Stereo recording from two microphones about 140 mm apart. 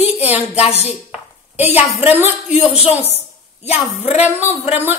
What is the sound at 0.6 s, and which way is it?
Speech, 45° left (ahead or behind).